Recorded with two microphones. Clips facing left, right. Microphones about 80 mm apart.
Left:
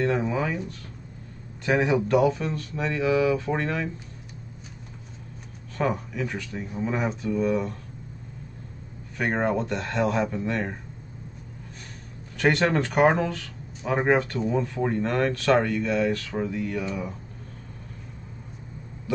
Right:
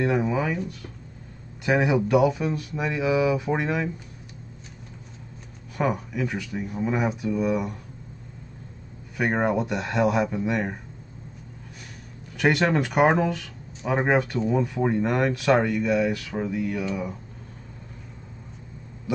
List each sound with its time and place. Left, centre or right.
0.0 s speech: centre
1.7 s speech: centre
5.8 s speech: centre
9.1 s speech: centre
12.4 s speech: centre
19.1 s speech: centre